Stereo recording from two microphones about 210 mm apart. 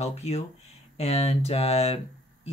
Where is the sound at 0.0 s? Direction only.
30° left (ahead or behind).